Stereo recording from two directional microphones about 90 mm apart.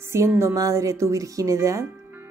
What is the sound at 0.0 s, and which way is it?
A woman's voice, 30° right (ahead or behind).